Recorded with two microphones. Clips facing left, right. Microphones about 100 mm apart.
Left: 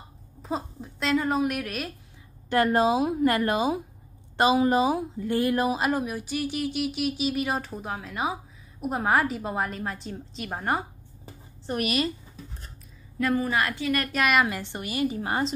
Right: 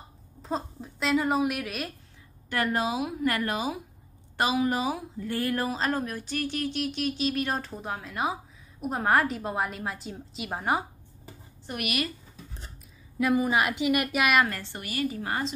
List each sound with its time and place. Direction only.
0.4 s a woman's voice: 5° left (ahead or behind)
2.5 s a woman's voice: 30° left (ahead or behind); by 10.9 s 5° right (ahead or behind)
11.6 s a woman's voice: 35° left (ahead or behind)
13.2 s a woman's voice: 15° right (ahead or behind)
14.1 s a woman's voice: centre (ahead or behind)
14.5 s a woman's voice: 20° left (ahead or behind)